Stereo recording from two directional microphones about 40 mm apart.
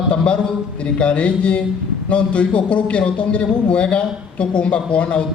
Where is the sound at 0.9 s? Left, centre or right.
Left.